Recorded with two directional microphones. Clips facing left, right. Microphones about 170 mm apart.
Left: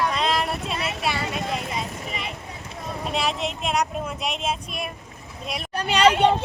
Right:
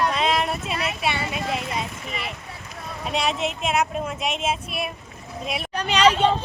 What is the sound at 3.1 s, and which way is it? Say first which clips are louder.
Speech: right 2 dB; centre (ahead or behind).